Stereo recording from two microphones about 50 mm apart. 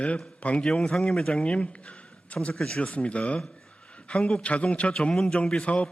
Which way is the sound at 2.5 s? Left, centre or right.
Centre.